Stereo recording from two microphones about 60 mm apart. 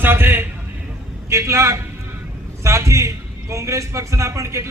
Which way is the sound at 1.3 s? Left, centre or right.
Right.